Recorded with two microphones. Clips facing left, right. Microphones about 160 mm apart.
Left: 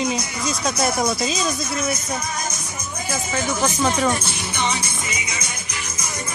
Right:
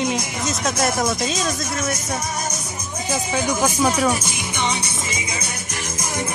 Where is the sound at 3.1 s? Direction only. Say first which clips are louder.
Right 2 dB; 15° right (ahead or behind).